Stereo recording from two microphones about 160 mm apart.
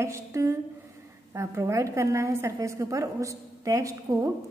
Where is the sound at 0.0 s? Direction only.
20° right (ahead or behind).